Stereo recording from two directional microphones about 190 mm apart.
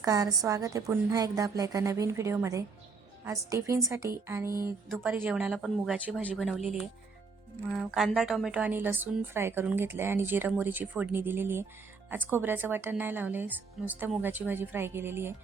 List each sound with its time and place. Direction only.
0.0 s a woman's voice: 20° right (ahead or behind); by 6.6 s centre (ahead or behind)
7.7 s a woman's voice: centre (ahead or behind)